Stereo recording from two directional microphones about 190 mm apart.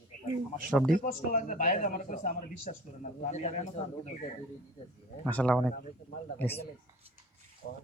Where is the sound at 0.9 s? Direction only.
45° left (ahead or behind).